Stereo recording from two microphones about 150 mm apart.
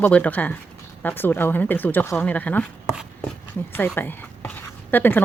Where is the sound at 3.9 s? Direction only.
15° left (ahead or behind).